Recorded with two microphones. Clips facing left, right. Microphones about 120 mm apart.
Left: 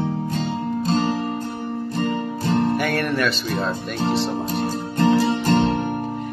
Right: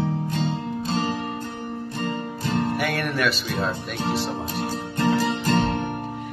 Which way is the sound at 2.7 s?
Centre (ahead or behind).